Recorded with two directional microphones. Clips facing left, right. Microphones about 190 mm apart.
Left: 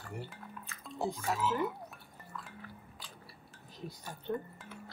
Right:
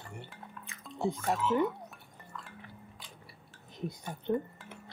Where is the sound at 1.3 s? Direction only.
Centre (ahead or behind).